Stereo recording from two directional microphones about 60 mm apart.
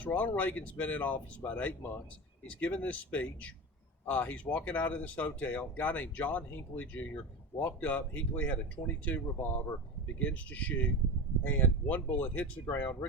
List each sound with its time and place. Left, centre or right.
0.0 s speech: left